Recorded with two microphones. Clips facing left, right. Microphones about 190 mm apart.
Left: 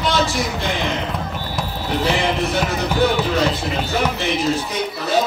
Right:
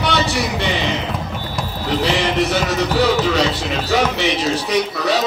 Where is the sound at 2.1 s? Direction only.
80° right.